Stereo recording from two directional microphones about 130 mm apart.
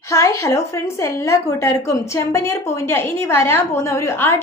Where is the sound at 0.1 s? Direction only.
25° left (ahead or behind).